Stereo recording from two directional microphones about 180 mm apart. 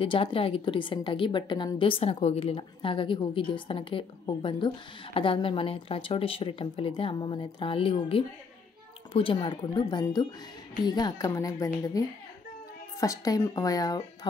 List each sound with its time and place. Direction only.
0.0 s a woman's voice: 30° left (ahead or behind)
13.0 s a woman's voice: 20° left (ahead or behind)